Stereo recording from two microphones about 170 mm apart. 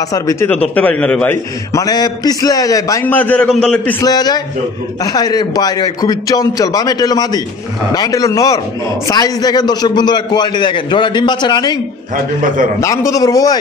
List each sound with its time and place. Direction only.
0.1 s a man's voice: 20° left (ahead or behind)
0.7 s a man's voice: 10° left (ahead or behind)
4.0 s a man's voice: 25° left (ahead or behind)
12.8 s a man's voice: 20° left (ahead or behind)